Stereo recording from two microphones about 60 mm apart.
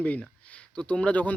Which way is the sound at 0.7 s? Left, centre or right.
Centre.